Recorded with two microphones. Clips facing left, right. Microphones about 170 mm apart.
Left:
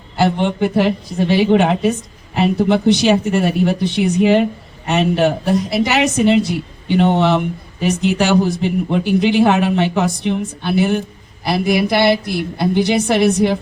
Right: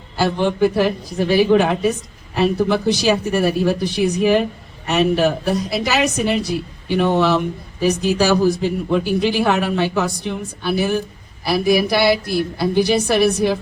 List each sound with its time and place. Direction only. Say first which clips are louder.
0.2 s a woman's voice: left 1 dB; 20° left (ahead or behind)